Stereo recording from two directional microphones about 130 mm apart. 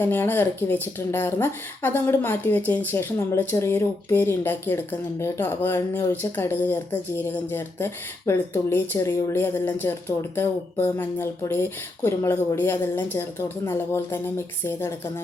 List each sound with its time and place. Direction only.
0.0 s speech: 15° left (ahead or behind)